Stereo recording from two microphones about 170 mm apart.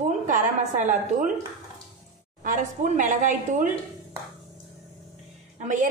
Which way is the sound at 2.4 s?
50° right (ahead or behind).